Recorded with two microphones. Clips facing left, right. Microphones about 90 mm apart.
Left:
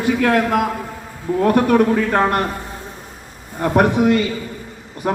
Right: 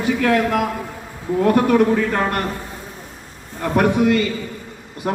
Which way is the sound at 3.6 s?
40° left (ahead or behind).